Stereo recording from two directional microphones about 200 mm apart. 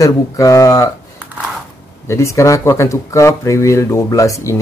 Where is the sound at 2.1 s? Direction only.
15° left (ahead or behind).